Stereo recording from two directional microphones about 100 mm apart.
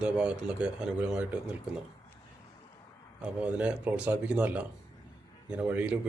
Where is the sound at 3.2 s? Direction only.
10° right (ahead or behind).